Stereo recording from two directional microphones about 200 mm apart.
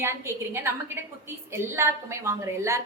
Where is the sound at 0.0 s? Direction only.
15° right (ahead or behind).